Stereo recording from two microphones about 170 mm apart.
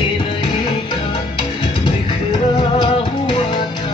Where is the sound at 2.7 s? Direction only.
25° left (ahead or behind).